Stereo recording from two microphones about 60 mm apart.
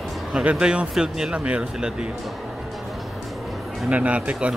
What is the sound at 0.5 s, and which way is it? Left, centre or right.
Speech, centre.